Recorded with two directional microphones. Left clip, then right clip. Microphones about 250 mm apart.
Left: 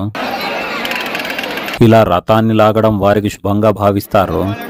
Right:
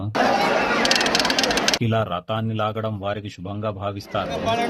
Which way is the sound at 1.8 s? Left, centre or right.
Left.